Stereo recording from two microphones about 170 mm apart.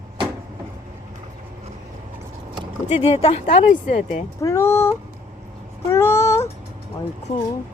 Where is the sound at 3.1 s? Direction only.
35° left (ahead or behind).